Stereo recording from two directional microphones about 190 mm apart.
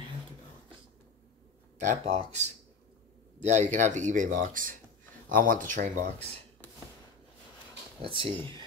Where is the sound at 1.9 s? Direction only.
35° right (ahead or behind).